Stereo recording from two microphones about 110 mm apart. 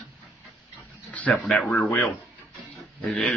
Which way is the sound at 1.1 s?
15° left (ahead or behind).